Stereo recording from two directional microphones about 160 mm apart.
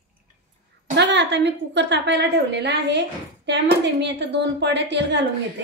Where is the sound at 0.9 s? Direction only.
90° right.